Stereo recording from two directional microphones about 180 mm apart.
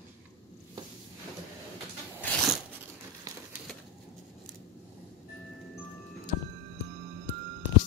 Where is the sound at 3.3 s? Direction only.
20° right (ahead or behind).